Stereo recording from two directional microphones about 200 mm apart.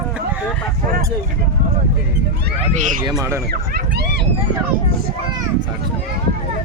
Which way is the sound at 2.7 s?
40° right (ahead or behind).